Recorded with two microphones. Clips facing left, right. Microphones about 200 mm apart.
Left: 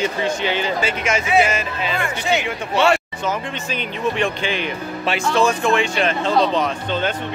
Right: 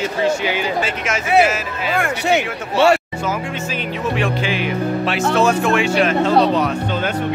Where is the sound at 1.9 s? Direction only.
55° right (ahead or behind).